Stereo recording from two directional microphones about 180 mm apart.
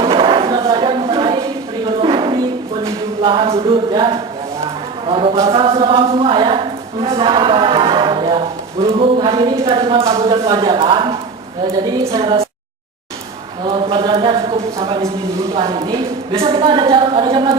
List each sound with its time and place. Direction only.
0.0 s a sound: 30° right (ahead or behind)
5.0 s a woman's voice: 30° right (ahead or behind)
12.2 s speech: 30° right (ahead or behind)
13.7 s a woman's voice: 25° right (ahead or behind)